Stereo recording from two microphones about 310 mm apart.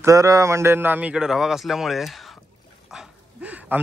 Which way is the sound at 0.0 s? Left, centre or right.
Centre.